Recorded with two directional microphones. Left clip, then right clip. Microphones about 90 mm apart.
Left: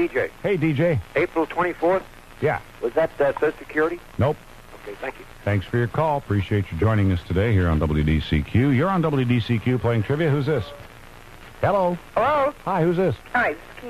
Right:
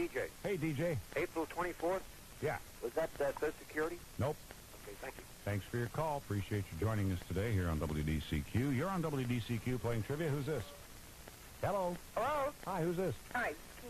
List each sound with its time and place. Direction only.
0.0 s speech: 35° left (ahead or behind)
11.6 s speech: 35° left (ahead or behind)